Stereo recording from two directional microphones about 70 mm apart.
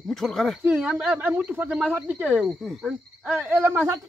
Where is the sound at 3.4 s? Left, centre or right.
Right.